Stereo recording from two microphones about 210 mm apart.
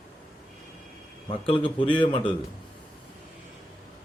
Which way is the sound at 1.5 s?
25° left (ahead or behind).